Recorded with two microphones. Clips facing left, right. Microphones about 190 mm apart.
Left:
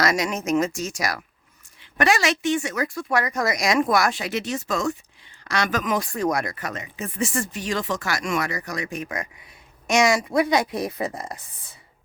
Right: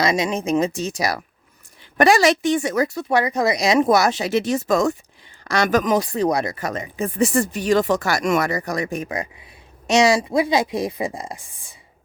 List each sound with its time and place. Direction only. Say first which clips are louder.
0.0 s a woman's voice: right 3 dB; 20° right (ahead or behind); by 9.0 s 40° right (ahead or behind)
10.0 s a woman's voice: right 2 dB; 30° right (ahead or behind)